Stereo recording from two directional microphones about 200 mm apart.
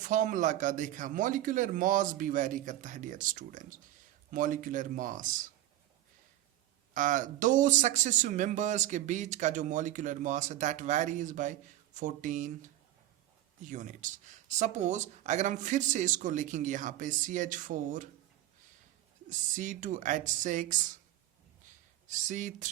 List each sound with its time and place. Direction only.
0.0 s speech: 40° right (ahead or behind)
6.9 s speech: 40° right (ahead or behind)
19.3 s speech: 40° right (ahead or behind)
22.0 s speech: 40° right (ahead or behind)